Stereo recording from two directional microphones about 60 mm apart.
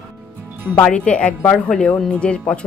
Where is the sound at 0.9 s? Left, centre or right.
Left.